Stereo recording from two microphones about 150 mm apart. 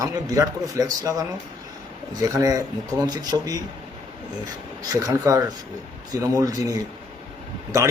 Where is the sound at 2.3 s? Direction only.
20° right (ahead or behind).